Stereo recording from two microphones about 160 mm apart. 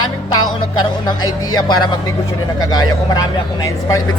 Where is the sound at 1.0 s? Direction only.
25° left (ahead or behind).